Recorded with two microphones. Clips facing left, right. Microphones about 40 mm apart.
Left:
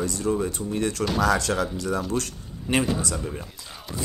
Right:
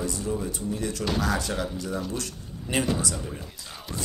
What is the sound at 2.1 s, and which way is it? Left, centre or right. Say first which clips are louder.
Speech: left 5 dB; left.